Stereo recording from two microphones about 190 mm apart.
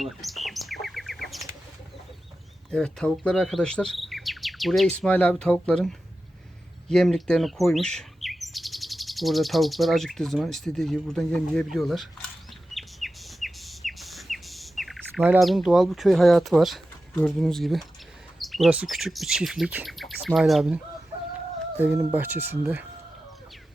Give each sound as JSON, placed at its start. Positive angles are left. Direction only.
{"t": 0.0, "sound": "bird", "side_deg": 0}
{"t": 2.6, "sound": "insect", "side_deg": 5}
{"t": 6.8, "sound": "speech", "side_deg": 5}
{"t": 12.7, "sound": "bird", "side_deg": 0}
{"t": 18.3, "sound": "speech", "side_deg": 0}